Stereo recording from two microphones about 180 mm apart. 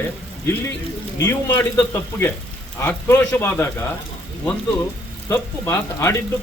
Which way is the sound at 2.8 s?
10° left (ahead or behind).